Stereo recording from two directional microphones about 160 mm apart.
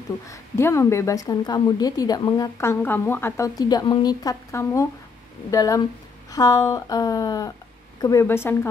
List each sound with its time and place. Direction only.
0.3 s a woman's voice: 15° left (ahead or behind)